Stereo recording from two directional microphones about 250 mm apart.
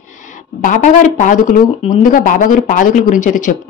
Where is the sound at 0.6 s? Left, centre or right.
Left.